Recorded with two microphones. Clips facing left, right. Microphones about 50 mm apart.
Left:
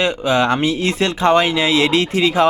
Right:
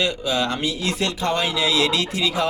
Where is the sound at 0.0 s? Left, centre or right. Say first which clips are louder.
Left 6 dB; left.